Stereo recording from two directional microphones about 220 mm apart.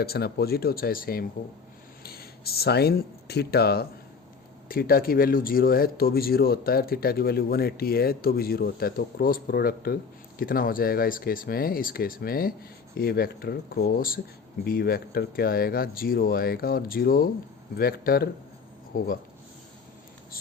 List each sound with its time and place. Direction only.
0.0 s speech: 45° left (ahead or behind)